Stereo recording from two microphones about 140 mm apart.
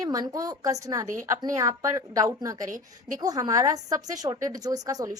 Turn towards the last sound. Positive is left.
turn(degrees=-25)  # may be behind; listen again after turning